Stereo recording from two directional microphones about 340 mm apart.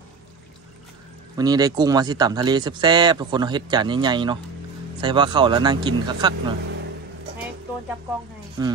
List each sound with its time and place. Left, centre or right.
1.3 s speech: centre
8.6 s speech: centre